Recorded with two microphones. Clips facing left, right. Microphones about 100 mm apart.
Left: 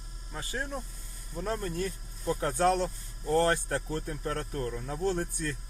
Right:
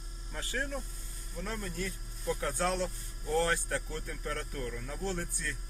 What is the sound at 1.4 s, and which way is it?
Speech, 40° left (ahead or behind).